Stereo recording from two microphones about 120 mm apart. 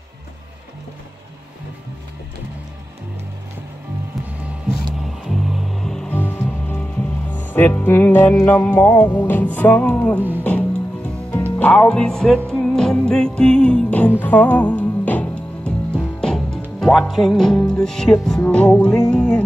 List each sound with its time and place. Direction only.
4.3 s music: 10° right (ahead or behind)
6.1 s music: 15° left (ahead or behind)